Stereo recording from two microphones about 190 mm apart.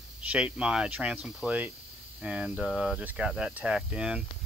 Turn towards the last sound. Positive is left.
turn(degrees=-5)  # may be behind; listen again after turning